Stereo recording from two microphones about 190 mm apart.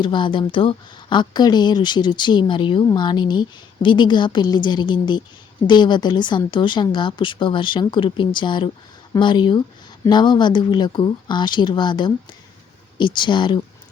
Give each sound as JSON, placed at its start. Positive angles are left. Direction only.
{"t": 0.0, "sound": "speech", "side_deg": 25}